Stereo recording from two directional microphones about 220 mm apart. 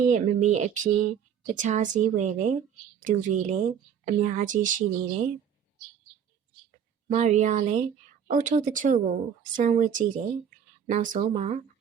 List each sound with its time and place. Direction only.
0.0 s speech: 35° right (ahead or behind)
7.1 s speech: 30° right (ahead or behind)